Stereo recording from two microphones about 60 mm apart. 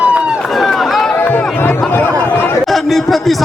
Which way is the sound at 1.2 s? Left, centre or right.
Left.